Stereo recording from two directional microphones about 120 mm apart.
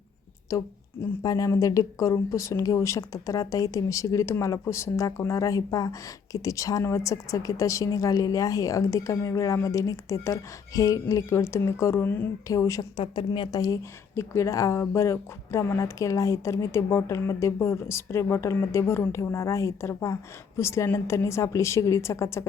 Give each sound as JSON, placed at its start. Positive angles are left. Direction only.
{"t": 0.5, "sound": "speech", "side_deg": 30}
{"t": 13.0, "sound": "a woman's voice", "side_deg": 45}
{"t": 14.2, "sound": "speech", "side_deg": 25}